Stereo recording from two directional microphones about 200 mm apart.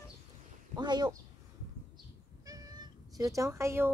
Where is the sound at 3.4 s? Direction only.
15° right (ahead or behind).